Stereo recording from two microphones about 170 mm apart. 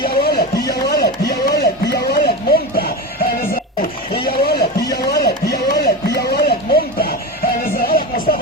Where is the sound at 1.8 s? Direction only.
70° left (ahead or behind).